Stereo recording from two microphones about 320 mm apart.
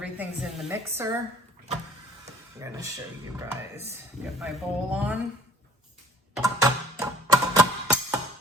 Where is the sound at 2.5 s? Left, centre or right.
Centre.